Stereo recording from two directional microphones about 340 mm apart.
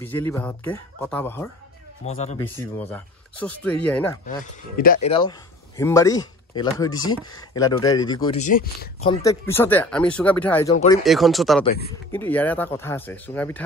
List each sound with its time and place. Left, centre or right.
0.0 s speech: centre
2.0 s speech: centre
2.4 s speech: centre
4.7 s speech: left; by 10.8 s centre
10.8 s speech: centre
11.1 s speech: centre